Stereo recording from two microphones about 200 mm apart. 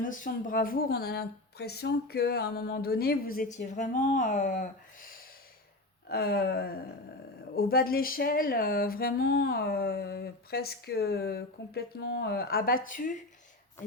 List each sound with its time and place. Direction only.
0.0 s speech: 40° left (ahead or behind)
6.1 s speech: 50° left (ahead or behind)